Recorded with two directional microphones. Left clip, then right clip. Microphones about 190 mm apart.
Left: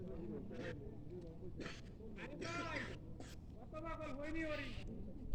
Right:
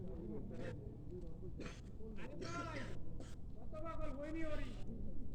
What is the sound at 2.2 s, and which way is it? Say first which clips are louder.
Music: left 2 dB; 45° left (ahead or behind).